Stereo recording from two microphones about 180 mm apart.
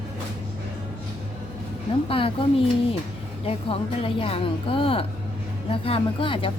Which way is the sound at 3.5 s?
30° left (ahead or behind).